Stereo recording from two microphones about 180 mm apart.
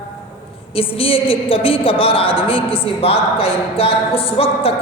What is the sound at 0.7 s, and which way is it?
A woman's voice, 30° left (ahead or behind).